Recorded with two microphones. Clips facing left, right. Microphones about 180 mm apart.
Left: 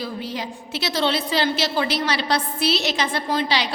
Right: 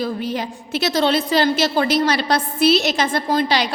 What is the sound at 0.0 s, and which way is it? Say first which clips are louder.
A woman's voice: right 6 dB; 50° right (ahead or behind).